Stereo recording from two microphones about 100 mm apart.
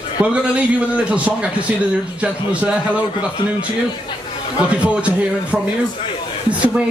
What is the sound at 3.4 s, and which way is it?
Speech, 55° left (ahead or behind).